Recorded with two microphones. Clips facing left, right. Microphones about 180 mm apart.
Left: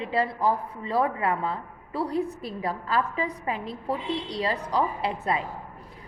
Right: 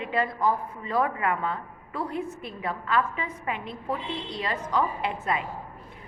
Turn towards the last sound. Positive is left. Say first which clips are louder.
# left 1 dB
turn(degrees=35)  # may be behind; listen again after turning